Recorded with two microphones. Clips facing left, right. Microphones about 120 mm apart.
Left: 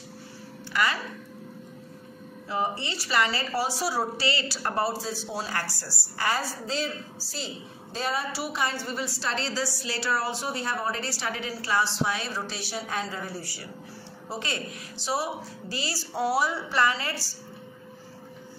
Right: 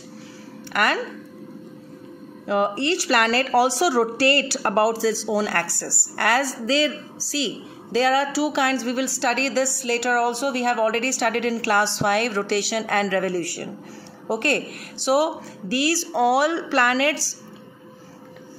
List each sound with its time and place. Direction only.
0.7 s speech: 60° right (ahead or behind)
2.4 s a woman's voice: 65° right (ahead or behind); by 17.4 s 85° right